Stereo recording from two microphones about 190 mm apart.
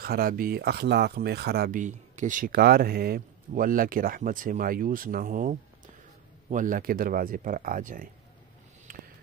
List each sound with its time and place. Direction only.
0.0 s speech: 50° right (ahead or behind)